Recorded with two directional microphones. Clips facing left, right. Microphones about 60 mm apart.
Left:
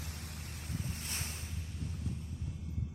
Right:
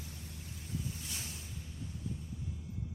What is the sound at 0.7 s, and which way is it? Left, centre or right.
Waves, left.